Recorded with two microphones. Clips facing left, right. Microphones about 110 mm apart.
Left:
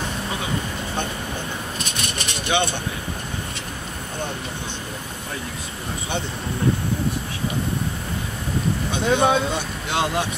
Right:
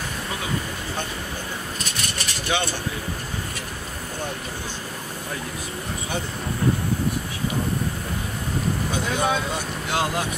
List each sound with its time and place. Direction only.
1.8 s vehicle: 20° left (ahead or behind)
8.9 s speech: 70° left (ahead or behind)
9.2 s speech: 25° left (ahead or behind)